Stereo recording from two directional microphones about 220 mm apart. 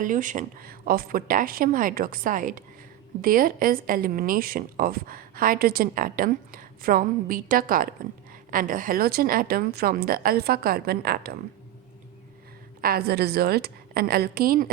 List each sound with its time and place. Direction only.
0.0 s a woman's voice: 35° right (ahead or behind)
12.8 s a woman's voice: 45° right (ahead or behind)